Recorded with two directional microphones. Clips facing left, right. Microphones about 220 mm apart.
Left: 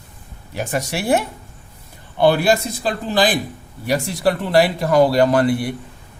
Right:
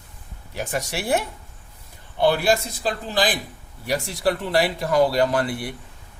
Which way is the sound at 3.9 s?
75° left (ahead or behind).